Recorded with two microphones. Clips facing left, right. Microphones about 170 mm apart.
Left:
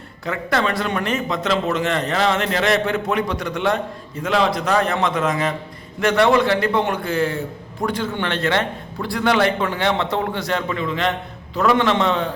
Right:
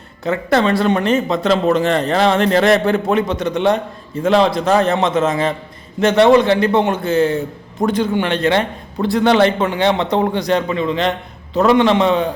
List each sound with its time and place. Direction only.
0.3 s a man's voice: 25° right (ahead or behind)